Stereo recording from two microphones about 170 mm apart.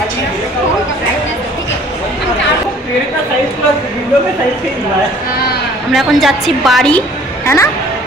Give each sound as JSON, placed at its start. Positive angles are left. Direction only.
{"t": 5.9, "sound": "a woman's voice", "side_deg": 0}
{"t": 7.4, "sound": "speech", "side_deg": 15}